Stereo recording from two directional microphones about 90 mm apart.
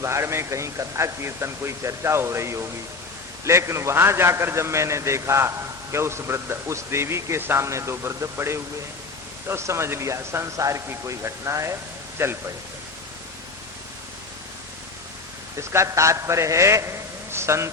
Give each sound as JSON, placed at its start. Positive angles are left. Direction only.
{"t": 0.0, "sound": "a man's voice", "side_deg": -30}
{"t": 15.5, "sound": "a man's voice", "side_deg": -35}